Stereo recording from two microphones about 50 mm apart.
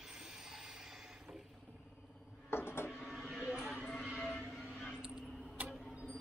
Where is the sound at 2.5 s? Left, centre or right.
Left.